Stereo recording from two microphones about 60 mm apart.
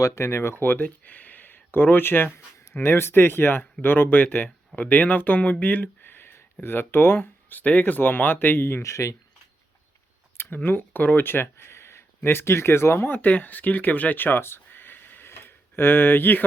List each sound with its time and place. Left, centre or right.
0.0 s speech: left
7.6 s speech: left
8.8 s speech: left
10.3 s speech: left